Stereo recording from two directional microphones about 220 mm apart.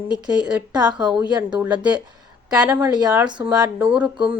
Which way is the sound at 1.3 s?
20° right (ahead or behind).